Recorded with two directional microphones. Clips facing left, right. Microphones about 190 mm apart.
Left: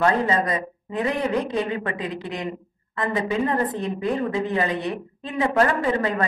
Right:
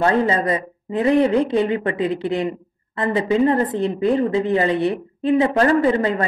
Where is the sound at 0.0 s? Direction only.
30° right (ahead or behind).